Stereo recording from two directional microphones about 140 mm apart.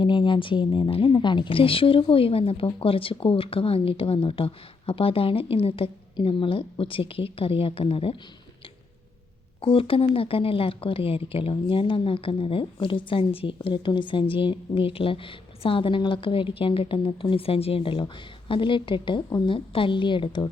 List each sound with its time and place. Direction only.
0.0 s speech: 35° left (ahead or behind)
9.6 s speech: 40° left (ahead or behind)